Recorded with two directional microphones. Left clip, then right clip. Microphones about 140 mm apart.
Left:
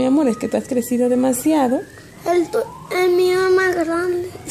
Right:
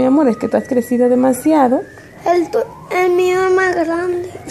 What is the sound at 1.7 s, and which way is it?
A woman's voice, centre (ahead or behind).